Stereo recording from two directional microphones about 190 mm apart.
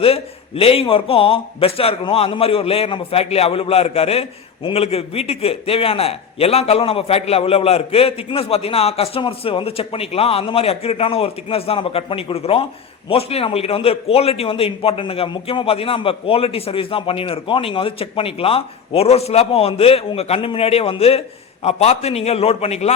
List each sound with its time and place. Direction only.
0.0 s a man's voice: 30° left (ahead or behind)